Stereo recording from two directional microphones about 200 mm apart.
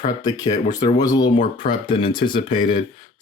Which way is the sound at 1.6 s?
45° left (ahead or behind).